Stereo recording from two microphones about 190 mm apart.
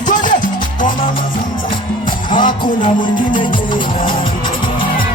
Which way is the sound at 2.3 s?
25° left (ahead or behind).